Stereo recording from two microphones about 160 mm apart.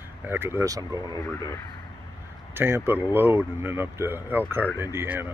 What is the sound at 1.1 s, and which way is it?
Speech, 20° left (ahead or behind).